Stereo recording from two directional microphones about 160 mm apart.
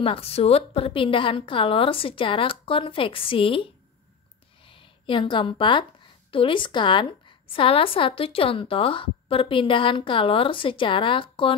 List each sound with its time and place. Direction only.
0.0 s a woman's voice: 35° left (ahead or behind)
4.6 s a woman's voice: 35° left (ahead or behind)